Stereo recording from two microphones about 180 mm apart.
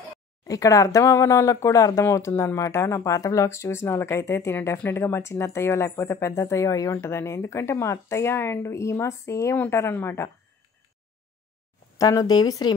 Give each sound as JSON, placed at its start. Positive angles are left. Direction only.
{"t": 0.5, "sound": "speech", "side_deg": 20}
{"t": 12.0, "sound": "speech", "side_deg": 20}